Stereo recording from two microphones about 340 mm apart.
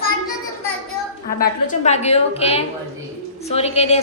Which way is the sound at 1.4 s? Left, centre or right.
Left.